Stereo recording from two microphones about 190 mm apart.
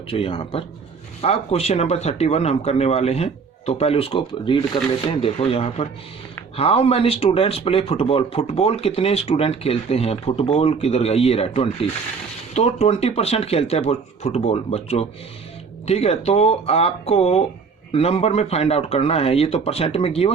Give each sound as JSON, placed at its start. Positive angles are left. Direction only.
{"t": 0.1, "sound": "speech", "side_deg": 30}